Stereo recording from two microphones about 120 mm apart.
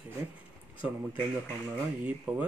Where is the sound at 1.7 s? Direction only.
10° right (ahead or behind).